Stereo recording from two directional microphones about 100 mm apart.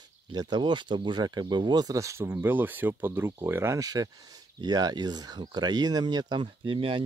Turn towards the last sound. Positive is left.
turn(degrees=-60)  # may be behind; listen again after turning